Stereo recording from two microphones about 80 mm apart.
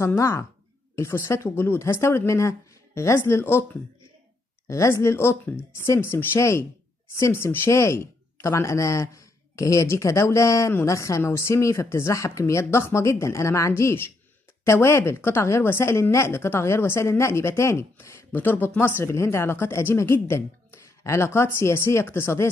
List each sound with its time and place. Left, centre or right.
0.0 s speech: left
4.6 s speech: left